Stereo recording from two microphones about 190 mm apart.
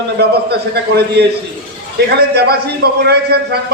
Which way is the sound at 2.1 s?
60° right (ahead or behind).